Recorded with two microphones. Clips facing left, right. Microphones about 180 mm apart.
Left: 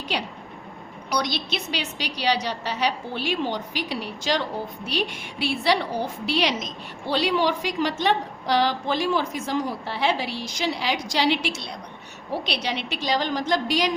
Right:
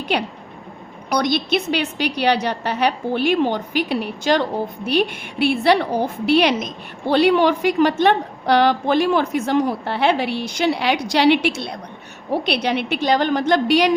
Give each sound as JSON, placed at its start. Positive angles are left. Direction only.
{"t": 0.1, "sound": "a woman's voice", "side_deg": -55}